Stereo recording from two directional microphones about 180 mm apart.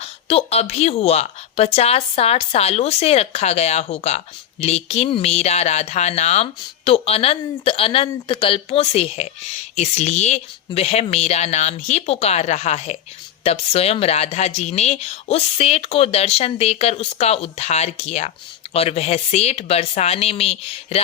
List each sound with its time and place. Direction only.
0.0 s speech: 35° left (ahead or behind)